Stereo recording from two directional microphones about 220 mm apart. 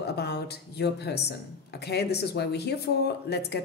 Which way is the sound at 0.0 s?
50° left (ahead or behind).